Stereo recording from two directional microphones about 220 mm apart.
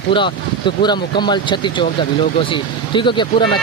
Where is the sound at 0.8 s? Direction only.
20° left (ahead or behind).